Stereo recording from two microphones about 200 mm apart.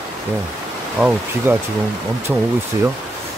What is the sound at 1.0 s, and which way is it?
Speech, 5° right (ahead or behind).